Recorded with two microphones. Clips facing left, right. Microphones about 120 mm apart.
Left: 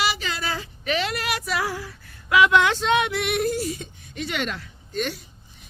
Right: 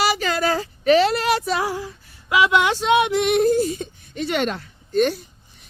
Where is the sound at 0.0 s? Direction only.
45° right (ahead or behind); by 1.6 s 30° right (ahead or behind).